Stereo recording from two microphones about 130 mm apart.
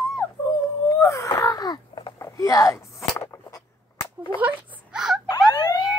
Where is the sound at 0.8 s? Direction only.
25° left (ahead or behind).